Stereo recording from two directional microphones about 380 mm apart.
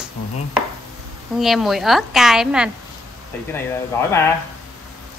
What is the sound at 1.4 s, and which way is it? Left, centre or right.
Speech, centre.